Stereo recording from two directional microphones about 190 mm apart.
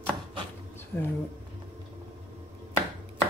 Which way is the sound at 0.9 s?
10° left (ahead or behind).